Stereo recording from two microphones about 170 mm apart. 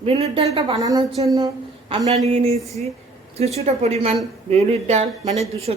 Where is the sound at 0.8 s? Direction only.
20° right (ahead or behind).